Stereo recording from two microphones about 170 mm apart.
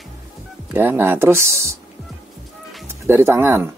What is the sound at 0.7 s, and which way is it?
Speech, 10° right (ahead or behind).